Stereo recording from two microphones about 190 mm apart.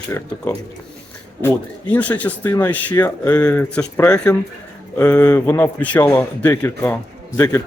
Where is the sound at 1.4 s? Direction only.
10° left (ahead or behind).